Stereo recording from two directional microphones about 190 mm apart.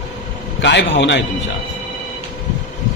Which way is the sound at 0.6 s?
70° left (ahead or behind).